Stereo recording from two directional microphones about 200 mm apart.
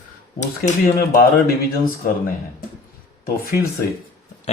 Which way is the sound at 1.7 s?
45° left (ahead or behind).